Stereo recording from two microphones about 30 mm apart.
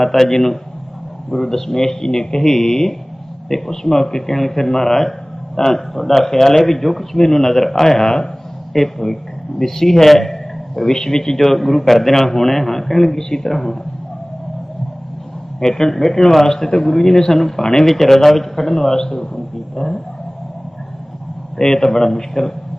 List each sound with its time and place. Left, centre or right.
0.0 s speech: centre
5.9 s a man's voice: centre
10.9 s speech: centre
11.3 s speech: centre
15.6 s speech: centre
17.8 s speech: centre
21.6 s speech: centre